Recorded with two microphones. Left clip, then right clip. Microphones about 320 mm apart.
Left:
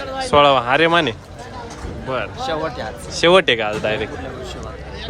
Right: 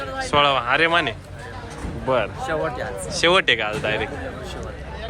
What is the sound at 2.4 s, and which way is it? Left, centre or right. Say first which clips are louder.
Speech: left 2 dB; left.